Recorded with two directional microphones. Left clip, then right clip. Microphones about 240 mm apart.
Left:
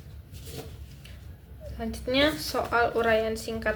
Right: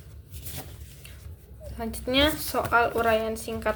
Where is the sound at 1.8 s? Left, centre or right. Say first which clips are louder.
Right 1 dB; centre.